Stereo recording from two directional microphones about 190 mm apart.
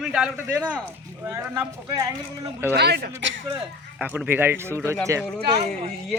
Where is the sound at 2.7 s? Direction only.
60° right (ahead or behind).